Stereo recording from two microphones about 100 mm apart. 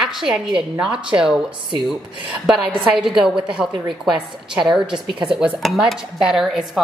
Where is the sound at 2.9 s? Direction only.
5° right (ahead or behind).